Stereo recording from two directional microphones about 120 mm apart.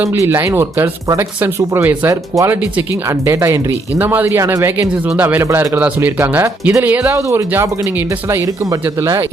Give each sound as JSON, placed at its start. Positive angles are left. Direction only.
{"t": 0.0, "sound": "a man's voice", "side_deg": -20}
{"t": 7.2, "sound": "speech", "side_deg": -25}